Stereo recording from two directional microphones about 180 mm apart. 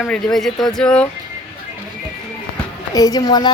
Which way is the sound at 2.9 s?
20° left (ahead or behind).